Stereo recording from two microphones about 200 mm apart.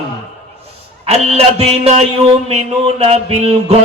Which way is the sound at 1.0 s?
30° right (ahead or behind).